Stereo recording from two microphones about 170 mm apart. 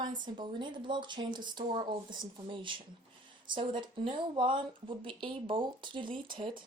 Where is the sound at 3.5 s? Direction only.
30° right (ahead or behind).